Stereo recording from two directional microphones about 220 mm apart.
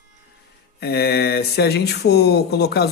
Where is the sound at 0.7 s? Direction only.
45° left (ahead or behind).